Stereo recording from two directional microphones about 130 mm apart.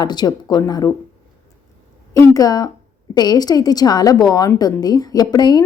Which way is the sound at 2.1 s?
25° left (ahead or behind).